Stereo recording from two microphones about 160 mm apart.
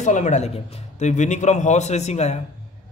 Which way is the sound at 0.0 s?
50° left (ahead or behind).